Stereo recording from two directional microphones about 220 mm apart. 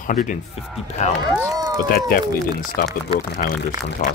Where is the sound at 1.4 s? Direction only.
15° right (ahead or behind).